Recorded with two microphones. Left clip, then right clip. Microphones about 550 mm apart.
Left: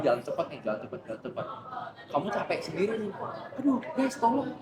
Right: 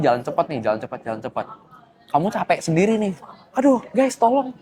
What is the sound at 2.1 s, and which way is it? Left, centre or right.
Speech, right.